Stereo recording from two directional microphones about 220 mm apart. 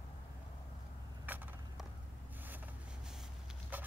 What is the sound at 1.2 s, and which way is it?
Vehicle, 10° right (ahead or behind).